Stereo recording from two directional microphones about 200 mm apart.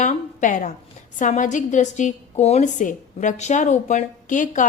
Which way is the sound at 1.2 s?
40° left (ahead or behind).